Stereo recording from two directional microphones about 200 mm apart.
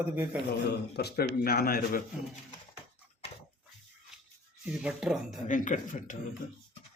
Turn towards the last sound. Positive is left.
turn(degrees=40)  # may be behind; listen again after turning